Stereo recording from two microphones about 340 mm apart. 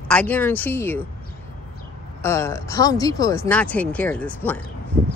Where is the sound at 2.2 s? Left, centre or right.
Centre.